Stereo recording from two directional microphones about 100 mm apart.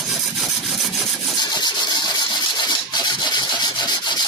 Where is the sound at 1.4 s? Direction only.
45° left (ahead or behind).